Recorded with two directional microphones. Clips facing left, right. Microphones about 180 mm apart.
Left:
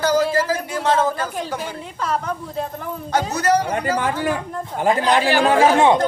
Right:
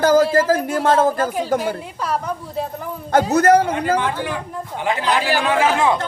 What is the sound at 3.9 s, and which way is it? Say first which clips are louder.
Speech: left 1 dB; 45° left (ahead or behind).